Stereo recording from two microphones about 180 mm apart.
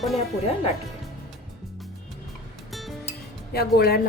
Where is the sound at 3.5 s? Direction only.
60° left (ahead or behind).